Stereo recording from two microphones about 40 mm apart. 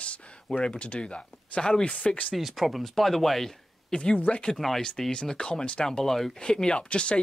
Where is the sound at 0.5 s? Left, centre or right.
Left.